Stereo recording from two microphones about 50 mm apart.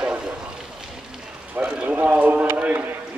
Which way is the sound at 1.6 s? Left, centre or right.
Right.